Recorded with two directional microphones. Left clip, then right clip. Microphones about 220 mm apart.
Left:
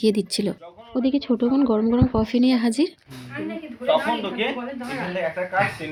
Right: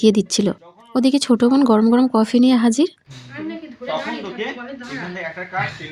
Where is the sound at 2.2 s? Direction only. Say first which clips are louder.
Right 5 dB; 35° right (ahead or behind).